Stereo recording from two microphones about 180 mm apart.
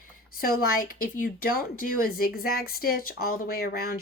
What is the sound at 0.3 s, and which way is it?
Speech, 50° left (ahead or behind).